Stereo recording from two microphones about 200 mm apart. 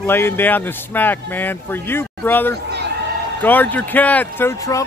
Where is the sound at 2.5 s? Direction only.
55° right (ahead or behind).